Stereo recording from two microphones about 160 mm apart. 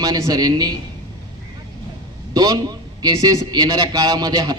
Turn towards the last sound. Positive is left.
turn(degrees=-25)  # may be behind; listen again after turning